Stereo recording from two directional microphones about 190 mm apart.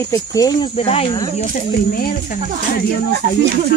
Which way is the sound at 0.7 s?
30° left (ahead or behind).